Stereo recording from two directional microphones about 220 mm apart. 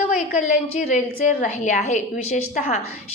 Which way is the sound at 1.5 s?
30° left (ahead or behind).